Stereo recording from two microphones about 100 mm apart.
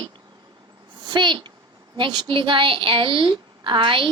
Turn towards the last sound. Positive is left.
turn(degrees=-60)  # may be behind; listen again after turning